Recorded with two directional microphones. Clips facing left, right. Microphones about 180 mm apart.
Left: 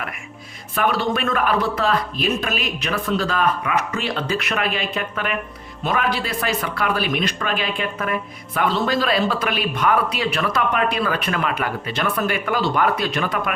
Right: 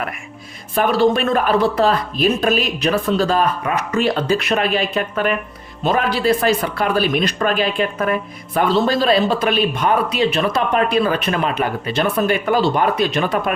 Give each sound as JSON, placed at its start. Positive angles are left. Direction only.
{"t": 0.8, "sound": "a man's voice", "side_deg": -30}